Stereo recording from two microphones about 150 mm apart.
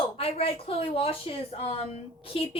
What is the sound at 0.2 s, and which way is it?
Speech, 40° left (ahead or behind).